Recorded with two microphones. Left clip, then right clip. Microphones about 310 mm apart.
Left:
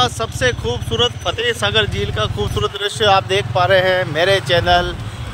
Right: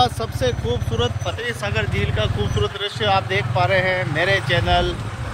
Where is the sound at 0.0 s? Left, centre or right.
Centre.